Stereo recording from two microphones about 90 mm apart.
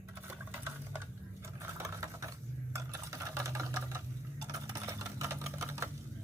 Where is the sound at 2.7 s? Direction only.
35° right (ahead or behind).